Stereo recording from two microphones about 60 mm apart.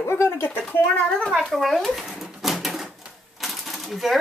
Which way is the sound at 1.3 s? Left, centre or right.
Centre.